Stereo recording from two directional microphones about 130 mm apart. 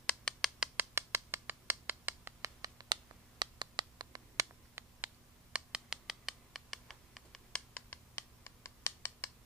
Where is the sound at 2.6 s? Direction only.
30° right (ahead or behind).